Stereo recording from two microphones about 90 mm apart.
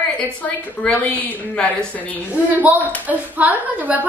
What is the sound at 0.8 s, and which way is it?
Speech, 10° left (ahead or behind).